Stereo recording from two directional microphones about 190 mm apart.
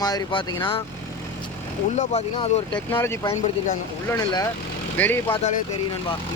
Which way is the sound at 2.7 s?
10° left (ahead or behind).